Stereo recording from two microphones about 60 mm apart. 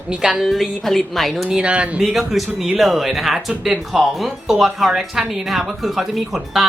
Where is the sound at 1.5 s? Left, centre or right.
Centre.